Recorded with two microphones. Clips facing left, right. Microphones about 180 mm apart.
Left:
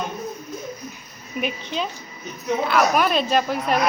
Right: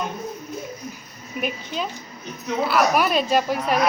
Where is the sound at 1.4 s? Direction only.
5° right (ahead or behind).